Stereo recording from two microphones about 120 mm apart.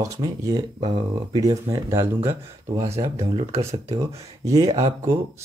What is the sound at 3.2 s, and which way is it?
Speech, 55° right (ahead or behind).